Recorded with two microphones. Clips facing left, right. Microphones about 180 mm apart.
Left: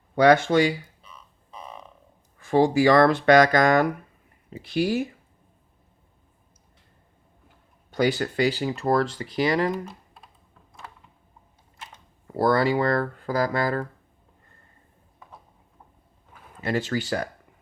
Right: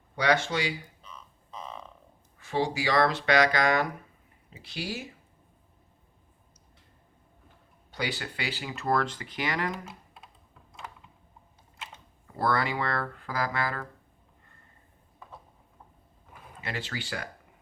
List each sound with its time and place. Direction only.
0.2 s speech: 50° left (ahead or behind)
1.0 s frog: 10° left (ahead or behind)
2.4 s speech: 50° left (ahead or behind)
7.9 s speech: 45° left (ahead or behind); by 9.7 s 30° left (ahead or behind)
12.4 s speech: 35° left (ahead or behind)
16.6 s speech: 45° left (ahead or behind)